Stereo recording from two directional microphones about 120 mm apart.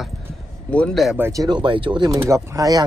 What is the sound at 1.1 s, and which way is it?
Speech, 20° right (ahead or behind).